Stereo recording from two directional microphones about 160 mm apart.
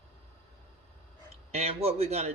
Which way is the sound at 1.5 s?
40° right (ahead or behind).